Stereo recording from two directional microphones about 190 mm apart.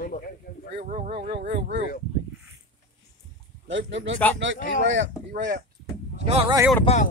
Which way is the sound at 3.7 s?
80° right.